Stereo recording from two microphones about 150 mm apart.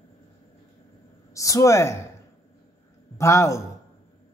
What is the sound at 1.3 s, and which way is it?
Speech, 20° left (ahead or behind).